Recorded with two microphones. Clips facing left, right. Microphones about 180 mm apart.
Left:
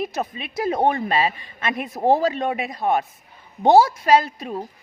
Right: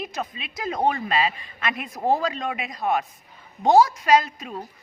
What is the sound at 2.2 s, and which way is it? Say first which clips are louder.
A woman's voice: left 5 dB; 30° left (ahead or behind).